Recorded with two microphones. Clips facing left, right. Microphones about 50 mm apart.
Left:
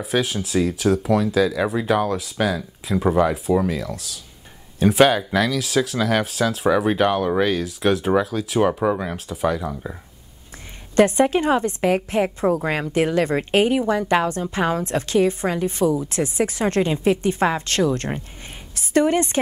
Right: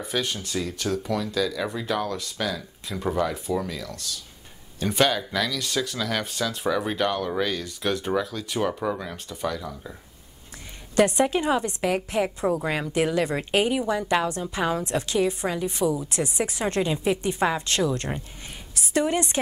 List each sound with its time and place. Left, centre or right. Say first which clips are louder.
0.0 s speech: left 6 dB; centre
1.4 s speech: left 7 dB; centre
2.3 s speech: left 7 dB; left
6.8 s speech: left 6 dB; centre
7.5 s speech: left 7 dB; centre
8.8 s speech: left 7 dB; left
9.1 s speech: left 7 dB; centre
11.0 s a woman's voice: left 4 dB; left